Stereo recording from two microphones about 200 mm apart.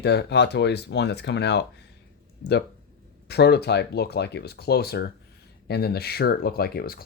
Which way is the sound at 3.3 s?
55° left (ahead or behind).